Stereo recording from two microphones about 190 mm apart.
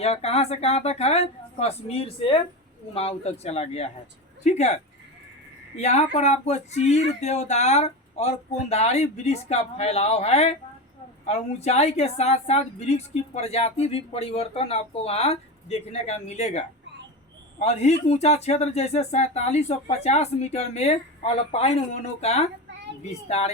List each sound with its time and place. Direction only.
0.0 s a woman's voice: 35° left (ahead or behind)